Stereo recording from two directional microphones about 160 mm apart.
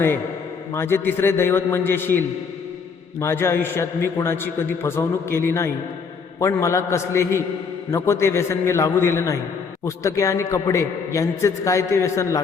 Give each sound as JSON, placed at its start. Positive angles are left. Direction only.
{"t": 0.7, "sound": "a man's voice", "side_deg": 15}